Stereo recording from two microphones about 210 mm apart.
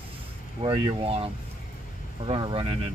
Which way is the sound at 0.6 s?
25° right (ahead or behind).